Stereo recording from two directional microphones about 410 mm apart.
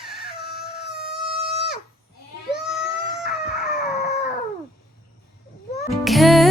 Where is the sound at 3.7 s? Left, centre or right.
Centre.